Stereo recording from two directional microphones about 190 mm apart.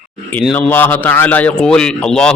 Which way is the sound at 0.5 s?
10° left (ahead or behind).